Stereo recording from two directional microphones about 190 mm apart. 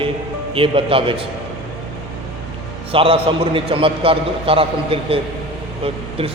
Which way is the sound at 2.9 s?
30° right (ahead or behind).